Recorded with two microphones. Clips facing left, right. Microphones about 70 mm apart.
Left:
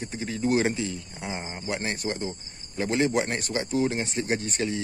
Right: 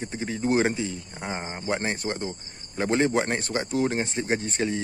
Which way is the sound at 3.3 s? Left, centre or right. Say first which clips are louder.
Right 1 dB; right.